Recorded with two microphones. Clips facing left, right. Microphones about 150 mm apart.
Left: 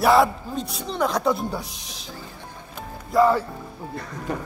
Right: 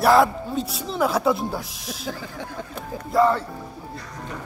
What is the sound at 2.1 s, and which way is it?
Speech, 90° right.